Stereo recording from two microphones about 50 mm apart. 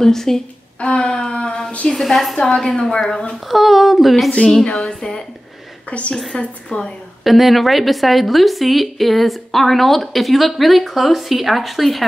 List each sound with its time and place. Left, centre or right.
0.0 s a woman's voice: centre
0.7 s a sound: left
1.9 s a woman's voice: centre
3.4 s a woman's voice: centre
4.8 s a woman's voice: centre
5.9 s a woman's voice: left
6.1 s a woman's voice: centre
7.2 s a woman's voice: centre